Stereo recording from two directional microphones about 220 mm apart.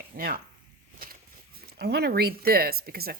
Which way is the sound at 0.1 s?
40° right (ahead or behind).